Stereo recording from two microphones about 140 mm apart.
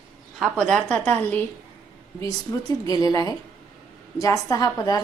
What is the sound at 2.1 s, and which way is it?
A woman's voice, 25° left (ahead or behind).